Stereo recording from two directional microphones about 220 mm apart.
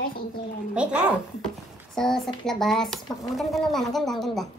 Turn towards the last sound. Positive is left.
turn(degrees=0)  # may be behind; listen again after turning